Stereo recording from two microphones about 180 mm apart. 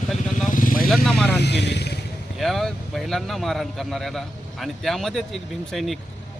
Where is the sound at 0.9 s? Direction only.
Centre (ahead or behind).